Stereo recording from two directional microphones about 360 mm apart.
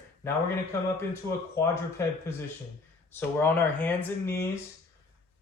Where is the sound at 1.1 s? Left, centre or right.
Centre.